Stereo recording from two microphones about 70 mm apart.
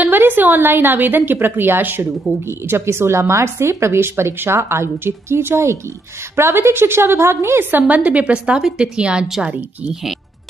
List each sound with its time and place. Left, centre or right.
0.0 s a woman's voice: right
7.9 s a woman's voice: centre